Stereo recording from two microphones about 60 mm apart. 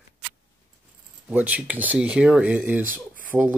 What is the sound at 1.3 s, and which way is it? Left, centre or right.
Speech, right.